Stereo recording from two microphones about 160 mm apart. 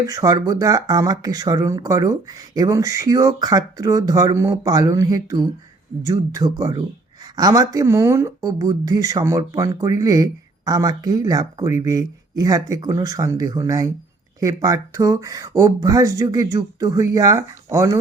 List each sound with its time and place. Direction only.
0.0 s speech: 20° right (ahead or behind)